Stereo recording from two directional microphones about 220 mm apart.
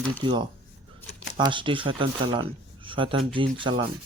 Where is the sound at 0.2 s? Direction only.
20° right (ahead or behind).